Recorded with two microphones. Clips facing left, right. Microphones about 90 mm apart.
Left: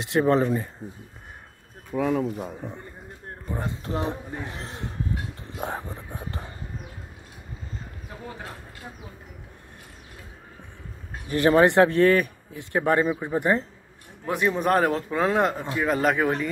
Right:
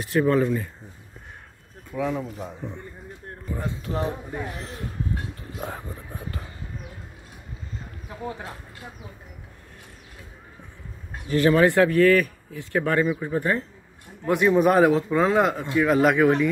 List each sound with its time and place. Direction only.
0.1 s speech: 25° left (ahead or behind)
2.0 s speech: 55° left (ahead or behind)
4.0 s speech: 30° left (ahead or behind)
11.2 s speech: 20° left (ahead or behind)
14.2 s a man's voice: centre (ahead or behind)